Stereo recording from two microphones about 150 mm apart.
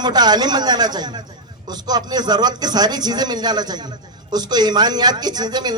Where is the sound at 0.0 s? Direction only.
30° right (ahead or behind).